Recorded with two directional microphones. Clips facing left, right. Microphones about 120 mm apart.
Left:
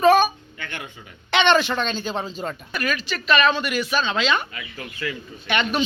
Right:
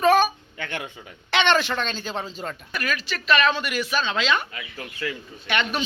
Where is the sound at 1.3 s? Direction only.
Centre (ahead or behind).